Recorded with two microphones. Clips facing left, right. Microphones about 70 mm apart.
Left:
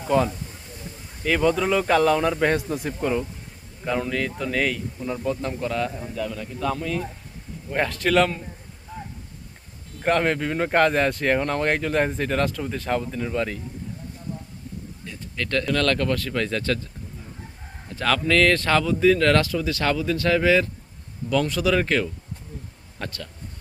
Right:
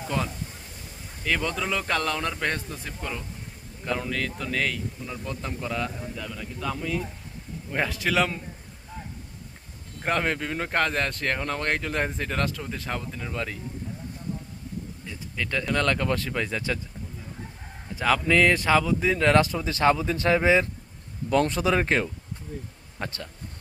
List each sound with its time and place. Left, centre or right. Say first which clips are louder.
0.0 s a man's voice: left 8 dB; centre
3.8 s speech: left 4 dB; centre
8.9 s a sound: left 4 dB; centre
10.0 s speech: left 5 dB; centre
15.0 s speech: left 3 dB; centre
17.8 s speech: left 1 dB; centre
21.2 s speech: left 1 dB; right